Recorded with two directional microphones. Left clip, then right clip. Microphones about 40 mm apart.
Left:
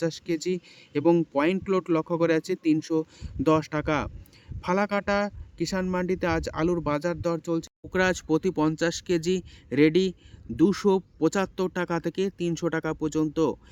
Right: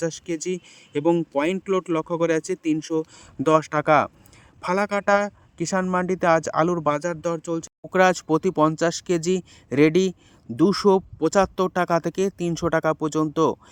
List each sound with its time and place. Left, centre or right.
0.0 s speech: right
1.1 s speech: right